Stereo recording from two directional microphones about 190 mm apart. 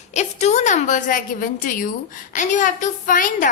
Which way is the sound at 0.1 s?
35° left (ahead or behind).